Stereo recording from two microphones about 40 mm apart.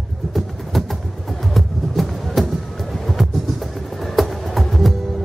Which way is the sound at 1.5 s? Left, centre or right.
Centre.